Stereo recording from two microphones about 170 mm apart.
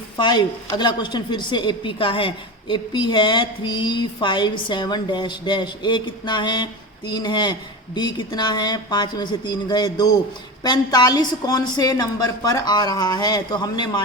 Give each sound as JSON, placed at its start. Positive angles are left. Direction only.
{"t": 0.2, "sound": "a woman's voice", "side_deg": 25}